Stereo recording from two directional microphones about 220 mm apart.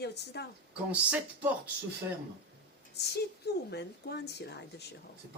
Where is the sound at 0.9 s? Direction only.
5° right (ahead or behind).